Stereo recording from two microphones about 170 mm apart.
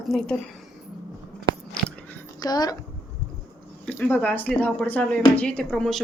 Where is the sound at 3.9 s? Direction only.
10° left (ahead or behind).